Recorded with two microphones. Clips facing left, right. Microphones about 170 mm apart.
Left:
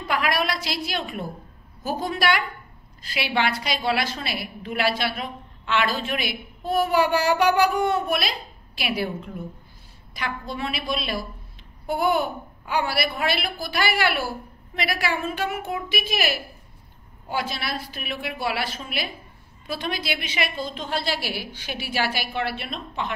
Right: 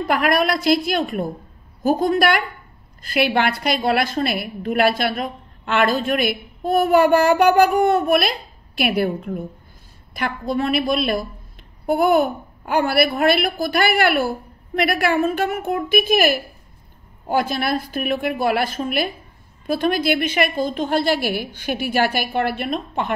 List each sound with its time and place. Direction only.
0.1 s a woman's voice: 50° right (ahead or behind)